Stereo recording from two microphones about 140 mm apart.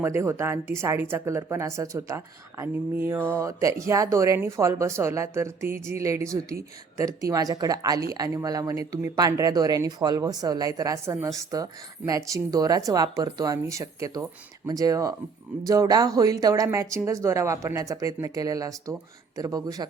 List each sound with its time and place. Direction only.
0.0 s speech: 20° right (ahead or behind)